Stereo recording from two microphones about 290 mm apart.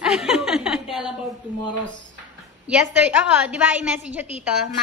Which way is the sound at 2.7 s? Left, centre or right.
Centre.